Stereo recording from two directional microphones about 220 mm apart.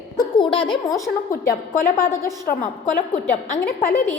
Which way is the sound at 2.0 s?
15° left (ahead or behind).